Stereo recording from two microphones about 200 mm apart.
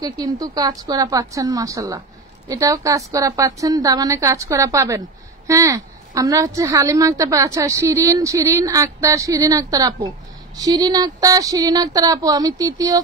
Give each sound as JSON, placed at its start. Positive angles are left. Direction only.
{"t": 0.0, "sound": "a woman's voice", "side_deg": -20}